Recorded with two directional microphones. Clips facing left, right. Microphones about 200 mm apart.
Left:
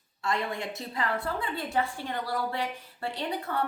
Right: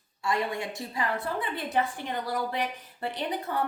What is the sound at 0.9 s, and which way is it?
A woman's voice, 20° right (ahead or behind).